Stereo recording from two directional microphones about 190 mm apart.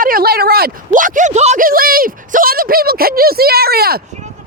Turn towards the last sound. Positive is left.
turn(degrees=-55)  # may be behind; listen again after turning